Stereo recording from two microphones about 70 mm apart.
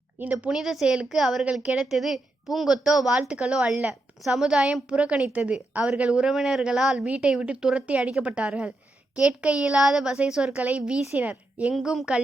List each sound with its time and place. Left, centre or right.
0.2 s a woman's voice: right
0.5 s a woman's voice: centre
10.6 s a woman's voice: centre
11.7 s speech: centre